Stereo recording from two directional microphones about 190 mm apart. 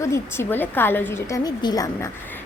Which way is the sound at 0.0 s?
15° left (ahead or behind).